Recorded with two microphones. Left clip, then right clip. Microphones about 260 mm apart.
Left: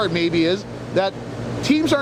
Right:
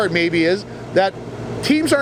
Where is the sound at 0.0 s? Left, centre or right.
Right.